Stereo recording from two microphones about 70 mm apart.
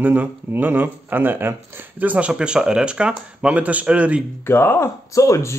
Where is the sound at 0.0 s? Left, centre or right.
Right.